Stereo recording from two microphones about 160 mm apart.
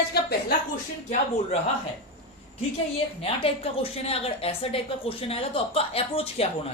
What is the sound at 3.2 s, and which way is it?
A woman's voice, 35° left (ahead or behind).